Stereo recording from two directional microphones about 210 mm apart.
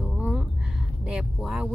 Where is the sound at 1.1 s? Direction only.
5° right (ahead or behind).